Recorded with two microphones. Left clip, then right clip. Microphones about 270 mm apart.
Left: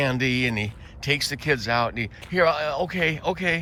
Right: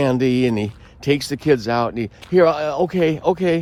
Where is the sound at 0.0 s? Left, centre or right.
Centre.